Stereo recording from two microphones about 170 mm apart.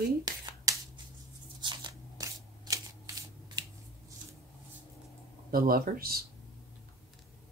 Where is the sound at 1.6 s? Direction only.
25° right (ahead or behind).